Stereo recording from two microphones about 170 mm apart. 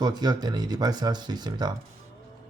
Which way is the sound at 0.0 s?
25° right (ahead or behind).